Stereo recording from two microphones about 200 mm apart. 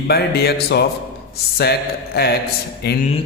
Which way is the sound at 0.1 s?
50° left (ahead or behind).